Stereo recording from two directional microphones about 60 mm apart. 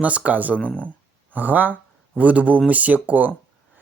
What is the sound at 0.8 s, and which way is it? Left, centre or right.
Speech, right.